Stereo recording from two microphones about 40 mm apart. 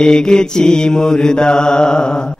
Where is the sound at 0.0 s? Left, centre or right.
Centre.